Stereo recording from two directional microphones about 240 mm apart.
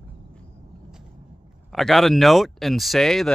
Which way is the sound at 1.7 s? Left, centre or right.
Centre.